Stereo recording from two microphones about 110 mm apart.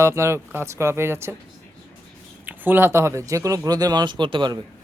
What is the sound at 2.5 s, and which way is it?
Speech, 20° right (ahead or behind).